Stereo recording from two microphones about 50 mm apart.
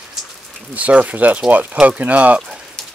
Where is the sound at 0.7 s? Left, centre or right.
Right.